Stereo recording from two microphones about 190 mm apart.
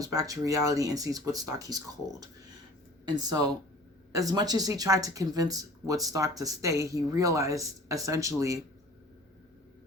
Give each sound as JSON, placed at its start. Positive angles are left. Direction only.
{"t": 0.0, "sound": "speech", "side_deg": -15}